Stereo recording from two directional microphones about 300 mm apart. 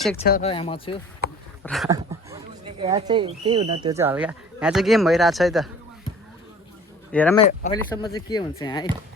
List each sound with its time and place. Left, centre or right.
0.2 s speech: left
1.6 s speech: centre
1.9 s speech: centre
7.1 s speech: centre